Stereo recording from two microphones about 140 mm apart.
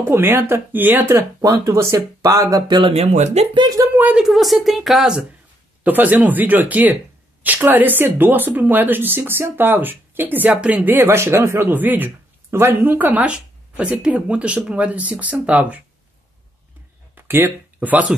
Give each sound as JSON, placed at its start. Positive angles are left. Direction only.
{"t": 0.1, "sound": "speech", "side_deg": -15}
{"t": 2.8, "sound": "speech", "side_deg": -50}
{"t": 3.5, "sound": "speech", "side_deg": -30}
{"t": 3.9, "sound": "a woman's voice", "side_deg": -10}
{"t": 17.1, "sound": "a sound", "side_deg": -15}